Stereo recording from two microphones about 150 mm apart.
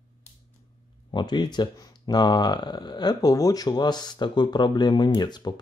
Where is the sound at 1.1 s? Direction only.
30° left (ahead or behind).